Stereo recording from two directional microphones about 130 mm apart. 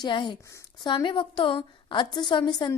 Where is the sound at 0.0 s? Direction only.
35° left (ahead or behind).